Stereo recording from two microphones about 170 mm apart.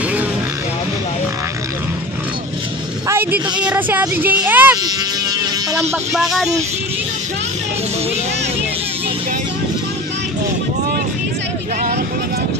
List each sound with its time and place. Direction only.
3.1 s a sound: 10° right (ahead or behind)
3.5 s speech: 10° right (ahead or behind)
4.8 s music: 20° right (ahead or behind)
6.1 s speech: centre (ahead or behind)